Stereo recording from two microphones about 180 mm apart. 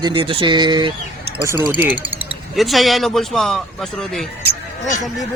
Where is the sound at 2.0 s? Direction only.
30° right (ahead or behind).